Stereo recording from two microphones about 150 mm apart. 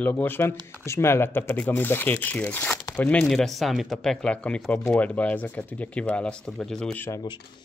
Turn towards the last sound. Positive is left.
turn(degrees=5)  # may be behind; listen again after turning